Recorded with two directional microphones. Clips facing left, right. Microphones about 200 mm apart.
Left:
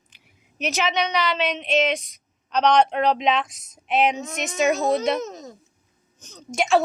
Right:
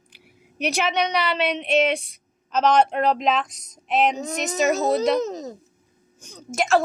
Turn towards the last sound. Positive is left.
turn(degrees=0)  # may be behind; listen again after turning